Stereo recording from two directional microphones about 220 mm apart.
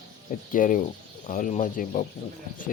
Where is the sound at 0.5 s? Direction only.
35° left (ahead or behind).